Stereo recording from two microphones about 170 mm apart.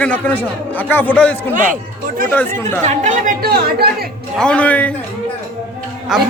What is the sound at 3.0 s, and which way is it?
Speech, 45° right (ahead or behind).